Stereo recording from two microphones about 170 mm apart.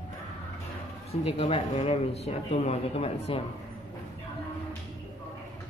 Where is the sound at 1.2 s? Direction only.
35° left (ahead or behind).